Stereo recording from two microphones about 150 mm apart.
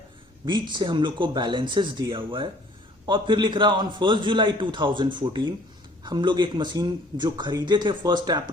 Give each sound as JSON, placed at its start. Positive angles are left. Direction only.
{"t": 0.4, "sound": "a man's voice", "side_deg": -30}